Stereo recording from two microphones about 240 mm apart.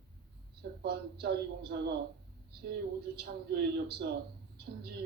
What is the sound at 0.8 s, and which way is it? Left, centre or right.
A woman's voice, right.